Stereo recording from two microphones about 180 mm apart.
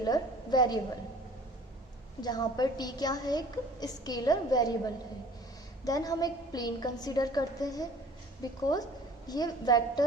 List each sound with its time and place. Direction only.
0.0 s a woman's voice: 20° left (ahead or behind)
2.2 s a woman's voice: 20° left (ahead or behind)
5.8 s a woman's voice: 20° left (ahead or behind)